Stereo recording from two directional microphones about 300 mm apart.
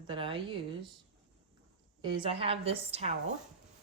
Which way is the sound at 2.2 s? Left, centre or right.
Centre.